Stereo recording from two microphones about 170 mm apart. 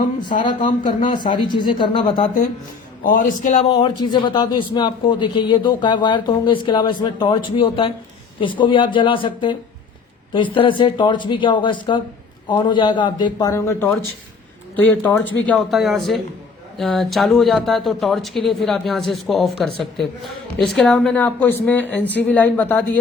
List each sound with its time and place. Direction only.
0.4 s a man's voice: 30° left (ahead or behind)
3.0 s a man's voice: 50° left (ahead or behind); by 22.8 s 10° left (ahead or behind)